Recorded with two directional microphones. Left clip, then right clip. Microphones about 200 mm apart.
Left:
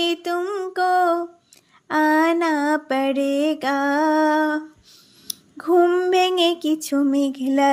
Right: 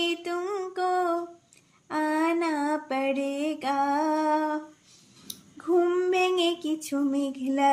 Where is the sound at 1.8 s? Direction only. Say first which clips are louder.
Left 9 dB; 40° left (ahead or behind).